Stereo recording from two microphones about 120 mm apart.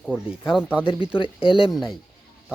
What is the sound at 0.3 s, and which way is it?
Speech, 5° right (ahead or behind).